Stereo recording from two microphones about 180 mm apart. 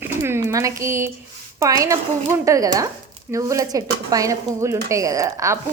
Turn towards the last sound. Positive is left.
turn(degrees=-15)  # may be behind; listen again after turning